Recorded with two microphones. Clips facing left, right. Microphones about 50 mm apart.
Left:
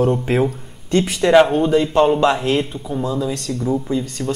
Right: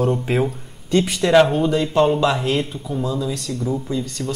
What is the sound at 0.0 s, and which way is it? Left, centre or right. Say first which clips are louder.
A man's voice: left 3 dB; centre.